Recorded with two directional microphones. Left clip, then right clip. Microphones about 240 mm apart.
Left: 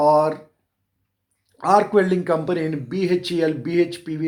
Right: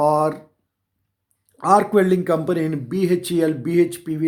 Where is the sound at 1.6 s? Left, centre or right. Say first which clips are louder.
Right 1 dB; right.